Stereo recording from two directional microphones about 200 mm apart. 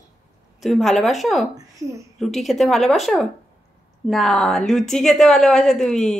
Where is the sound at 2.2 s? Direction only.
Centre (ahead or behind).